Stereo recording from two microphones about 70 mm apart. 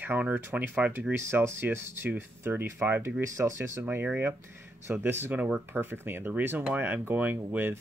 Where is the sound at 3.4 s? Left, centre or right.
Right.